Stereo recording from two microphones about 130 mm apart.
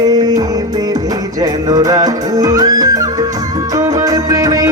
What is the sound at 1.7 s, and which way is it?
Music, 30° right (ahead or behind).